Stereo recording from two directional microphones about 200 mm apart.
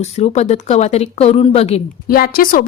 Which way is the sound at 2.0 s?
50° left (ahead or behind).